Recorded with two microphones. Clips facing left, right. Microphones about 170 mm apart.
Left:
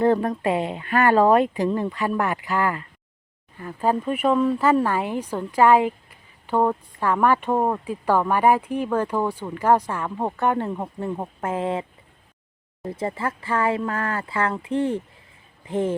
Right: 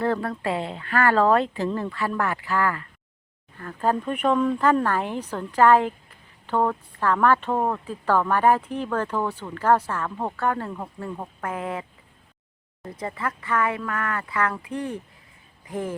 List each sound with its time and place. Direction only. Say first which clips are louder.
0.0 s speech: left 5 dB; 20° left (ahead or behind)